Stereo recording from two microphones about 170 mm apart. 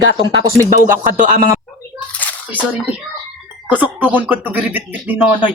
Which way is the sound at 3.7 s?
10° right (ahead or behind).